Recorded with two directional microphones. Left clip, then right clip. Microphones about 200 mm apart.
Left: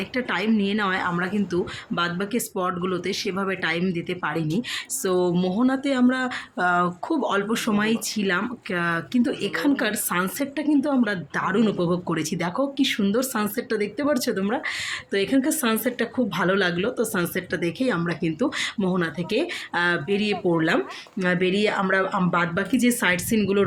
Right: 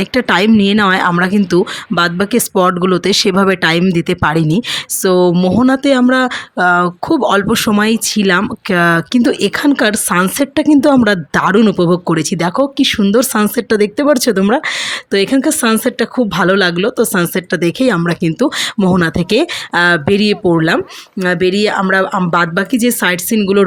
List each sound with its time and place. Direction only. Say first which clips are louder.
0.0 s speech: right 13 dB; 45° right (ahead or behind)